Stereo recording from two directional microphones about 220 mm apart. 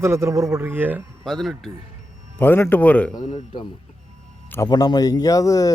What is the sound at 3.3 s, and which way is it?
A man's voice, 25° left (ahead or behind).